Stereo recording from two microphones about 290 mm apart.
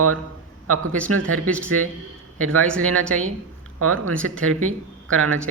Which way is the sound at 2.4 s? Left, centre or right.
Right.